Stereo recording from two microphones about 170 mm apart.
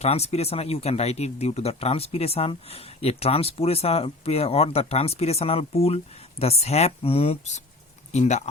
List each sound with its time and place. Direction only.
0.0 s speech: 40° left (ahead or behind)